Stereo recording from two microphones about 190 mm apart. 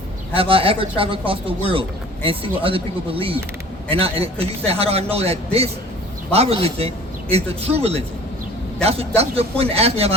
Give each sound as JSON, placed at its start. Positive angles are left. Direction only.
{"t": 0.3, "sound": "a man's voice", "side_deg": -30}